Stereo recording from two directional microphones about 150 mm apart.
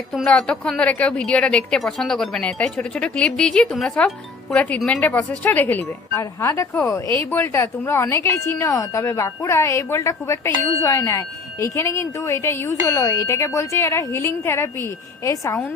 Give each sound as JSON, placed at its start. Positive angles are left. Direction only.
{"t": 0.1, "sound": "a woman's voice", "side_deg": 5}